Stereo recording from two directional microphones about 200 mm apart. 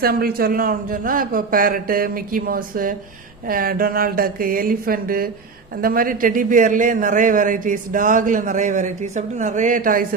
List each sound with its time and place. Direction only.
0.0 s a man's voice: 50° right (ahead or behind)